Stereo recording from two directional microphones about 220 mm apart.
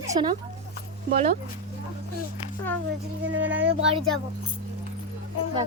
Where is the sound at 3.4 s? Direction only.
5° right (ahead or behind).